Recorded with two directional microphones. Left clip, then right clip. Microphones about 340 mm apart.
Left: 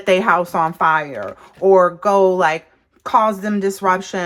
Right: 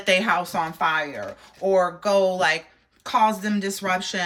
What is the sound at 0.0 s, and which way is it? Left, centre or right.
A woman's voice, centre.